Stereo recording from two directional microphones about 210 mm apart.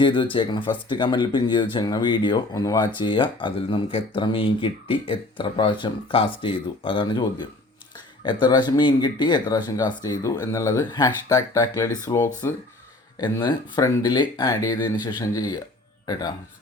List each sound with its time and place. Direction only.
0.0 s speech: 25° left (ahead or behind)